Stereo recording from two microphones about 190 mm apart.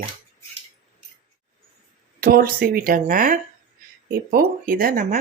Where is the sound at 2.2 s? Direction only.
50° right (ahead or behind).